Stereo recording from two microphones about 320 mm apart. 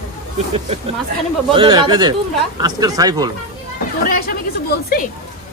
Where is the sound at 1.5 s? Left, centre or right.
Centre.